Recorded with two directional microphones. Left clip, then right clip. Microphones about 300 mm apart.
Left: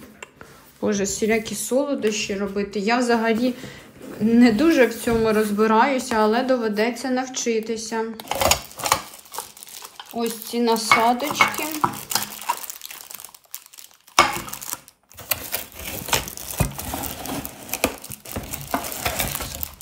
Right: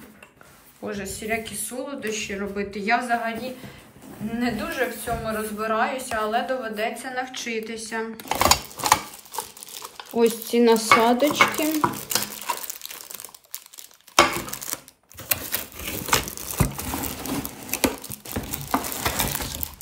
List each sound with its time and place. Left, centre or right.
0.9 s a woman's voice: centre
4.4 s a woman's voice: centre
9.3 s crumpling: centre
10.2 s stir: centre
14.1 s a sound: centre